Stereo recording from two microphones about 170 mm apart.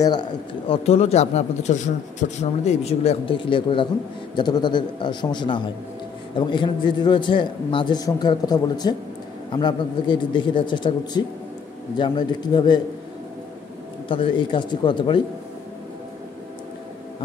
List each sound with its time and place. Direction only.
0.0 s a man's voice: 25° left (ahead or behind)
0.8 s a man's voice: 35° left (ahead or behind)
14.0 s a man's voice: 30° left (ahead or behind)